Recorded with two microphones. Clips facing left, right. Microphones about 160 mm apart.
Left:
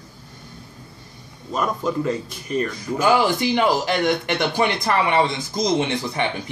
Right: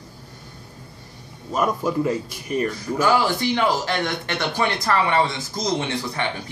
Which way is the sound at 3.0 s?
20° left (ahead or behind).